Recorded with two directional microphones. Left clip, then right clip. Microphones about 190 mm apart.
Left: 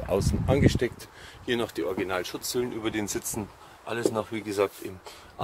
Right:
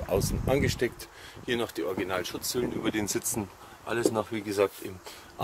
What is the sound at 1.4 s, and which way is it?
Speech, 25° left (ahead or behind).